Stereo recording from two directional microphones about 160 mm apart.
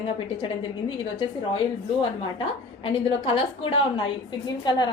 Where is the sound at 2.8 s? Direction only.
35° left (ahead or behind).